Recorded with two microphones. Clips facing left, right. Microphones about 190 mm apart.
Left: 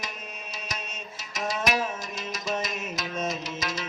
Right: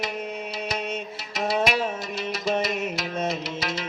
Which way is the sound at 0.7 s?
60° right (ahead or behind).